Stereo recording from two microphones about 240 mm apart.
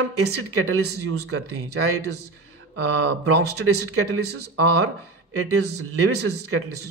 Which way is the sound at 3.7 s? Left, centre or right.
Right.